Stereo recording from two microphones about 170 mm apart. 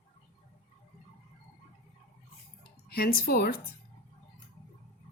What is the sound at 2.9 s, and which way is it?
Speech, 65° left (ahead or behind).